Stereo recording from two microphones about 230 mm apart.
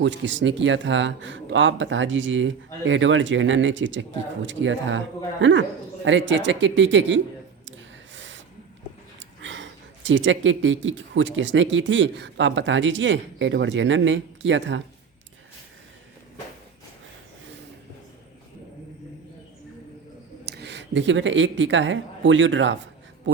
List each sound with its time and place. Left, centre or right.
0.0 s speech: right
8.1 s a sound: right
9.1 s speech: right
20.4 s speech: right